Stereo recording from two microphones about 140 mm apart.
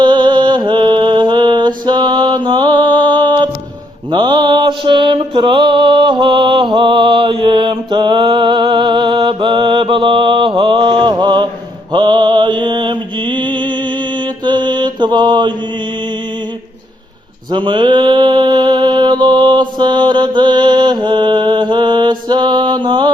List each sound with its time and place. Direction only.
0.0 s mantra: 35° right (ahead or behind)
17.5 s mantra: 35° right (ahead or behind)